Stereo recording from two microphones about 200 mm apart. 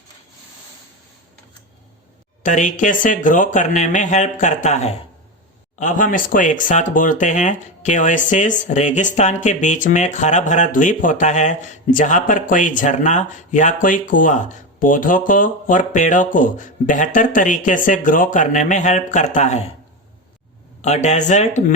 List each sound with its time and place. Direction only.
2.4 s speech: 40° left (ahead or behind)
20.8 s speech: 35° left (ahead or behind)